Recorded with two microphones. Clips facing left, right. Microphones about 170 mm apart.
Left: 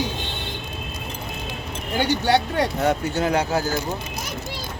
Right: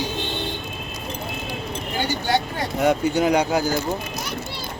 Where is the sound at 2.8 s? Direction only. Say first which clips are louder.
Right 3 dB; 15° right (ahead or behind).